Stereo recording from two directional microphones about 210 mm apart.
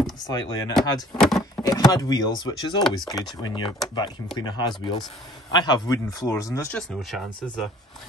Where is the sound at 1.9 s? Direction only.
15° left (ahead or behind).